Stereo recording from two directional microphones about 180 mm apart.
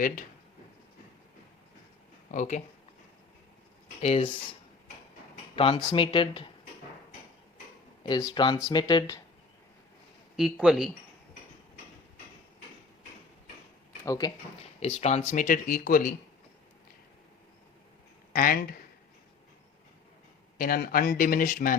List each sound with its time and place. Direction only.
2.3 s speech: 45° left (ahead or behind)
4.0 s speech: 35° left (ahead or behind)
5.5 s speech: 30° left (ahead or behind)
8.0 s speech: 20° left (ahead or behind)
10.3 s speech: centre (ahead or behind)
14.0 s speech: 20° left (ahead or behind)
14.8 s speech: 35° left (ahead or behind)
18.3 s speech: 55° left (ahead or behind)
20.6 s speech: 55° left (ahead or behind)